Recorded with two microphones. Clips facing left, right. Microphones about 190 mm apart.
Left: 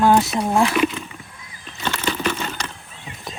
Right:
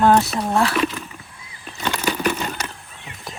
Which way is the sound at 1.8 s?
10° right (ahead or behind).